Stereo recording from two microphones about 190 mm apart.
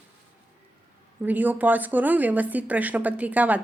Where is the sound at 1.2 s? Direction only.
10° right (ahead or behind).